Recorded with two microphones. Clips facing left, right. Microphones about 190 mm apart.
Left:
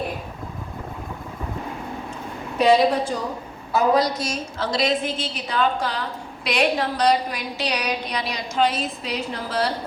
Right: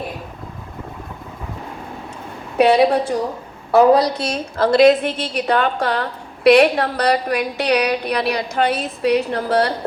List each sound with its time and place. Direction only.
2.6 s a woman's voice: 65° right (ahead or behind)